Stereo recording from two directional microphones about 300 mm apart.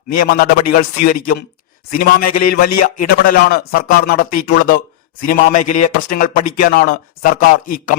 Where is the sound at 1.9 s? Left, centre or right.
Left.